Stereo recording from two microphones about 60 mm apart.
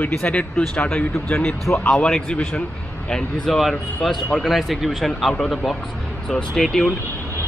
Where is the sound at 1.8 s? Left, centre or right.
Centre.